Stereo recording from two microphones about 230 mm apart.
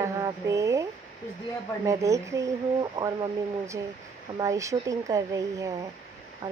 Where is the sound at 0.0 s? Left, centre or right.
Centre.